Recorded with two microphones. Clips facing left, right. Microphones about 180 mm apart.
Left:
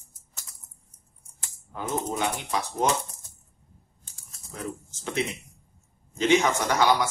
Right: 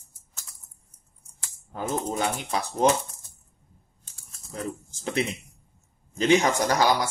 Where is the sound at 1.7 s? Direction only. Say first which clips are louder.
Right 1 dB; 35° right (ahead or behind).